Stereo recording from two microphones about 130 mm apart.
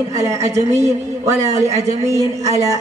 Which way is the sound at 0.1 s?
25° right (ahead or behind).